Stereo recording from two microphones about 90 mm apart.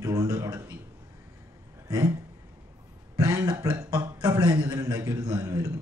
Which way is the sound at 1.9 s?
45° right (ahead or behind).